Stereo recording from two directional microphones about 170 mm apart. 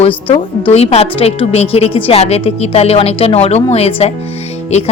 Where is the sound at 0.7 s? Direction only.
35° left (ahead or behind).